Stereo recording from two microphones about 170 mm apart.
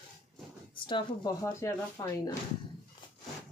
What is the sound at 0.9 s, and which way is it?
Speech, 30° left (ahead or behind).